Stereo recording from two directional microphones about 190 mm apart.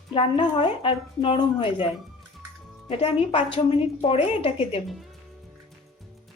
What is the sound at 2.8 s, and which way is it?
A woman's voice, 30° left (ahead or behind).